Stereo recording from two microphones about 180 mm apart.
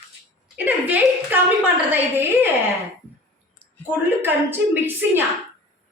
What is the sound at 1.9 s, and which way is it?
Speech, 10° right (ahead or behind).